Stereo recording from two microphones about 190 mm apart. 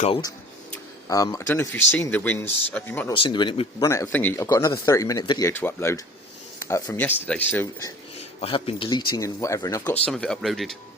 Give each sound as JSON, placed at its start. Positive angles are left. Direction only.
{"t": 1.0, "sound": "speech", "side_deg": 20}
{"t": 3.1, "sound": "speech", "side_deg": 25}
{"t": 8.4, "sound": "speech", "side_deg": 30}
{"t": 10.1, "sound": "speech", "side_deg": 0}